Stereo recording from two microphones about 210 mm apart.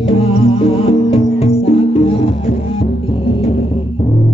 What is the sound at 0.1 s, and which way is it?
Music, 25° left (ahead or behind).